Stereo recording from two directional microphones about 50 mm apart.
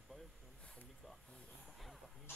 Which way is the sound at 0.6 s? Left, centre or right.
Centre.